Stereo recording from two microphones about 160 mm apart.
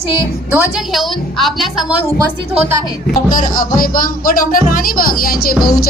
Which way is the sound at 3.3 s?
60° left (ahead or behind).